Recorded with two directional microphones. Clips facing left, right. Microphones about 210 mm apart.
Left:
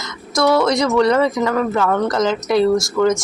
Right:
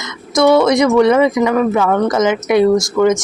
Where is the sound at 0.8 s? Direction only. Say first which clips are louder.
Right 4 dB; 5° right (ahead or behind).